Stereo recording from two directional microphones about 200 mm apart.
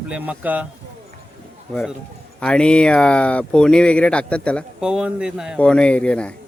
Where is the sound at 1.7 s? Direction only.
Centre (ahead or behind).